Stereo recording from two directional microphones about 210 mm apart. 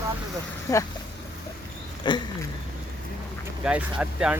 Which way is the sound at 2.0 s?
20° left (ahead or behind).